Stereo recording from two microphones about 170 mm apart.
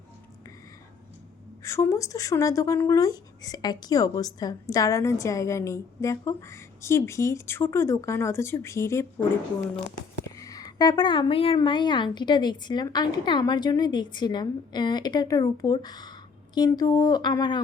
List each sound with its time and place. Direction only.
1.6 s a woman's voice: 15° left (ahead or behind)
10.3 s a woman's voice: 20° left (ahead or behind)